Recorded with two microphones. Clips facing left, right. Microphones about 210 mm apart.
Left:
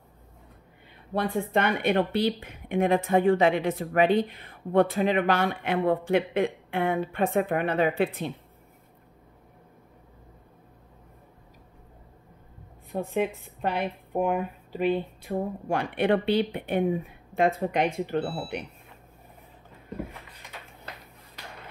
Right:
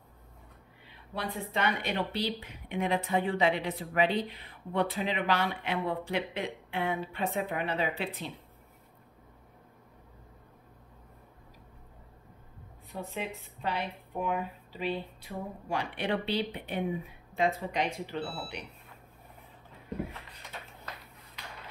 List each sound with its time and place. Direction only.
1.1 s speech: 50° left (ahead or behind)
12.9 s speech: 50° left (ahead or behind)